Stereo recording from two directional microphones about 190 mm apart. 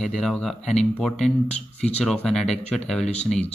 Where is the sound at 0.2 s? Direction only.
Centre (ahead or behind).